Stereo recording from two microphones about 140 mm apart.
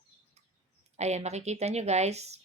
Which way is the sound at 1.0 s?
50° right (ahead or behind).